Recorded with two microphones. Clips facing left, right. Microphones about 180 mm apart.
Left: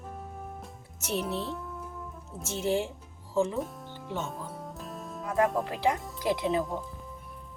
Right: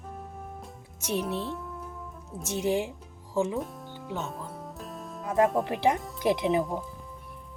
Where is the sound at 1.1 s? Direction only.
Centre (ahead or behind).